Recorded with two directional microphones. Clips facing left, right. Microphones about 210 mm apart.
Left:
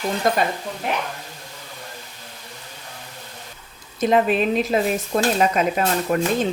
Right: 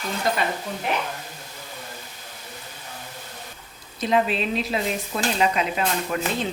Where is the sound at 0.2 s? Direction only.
50° left (ahead or behind).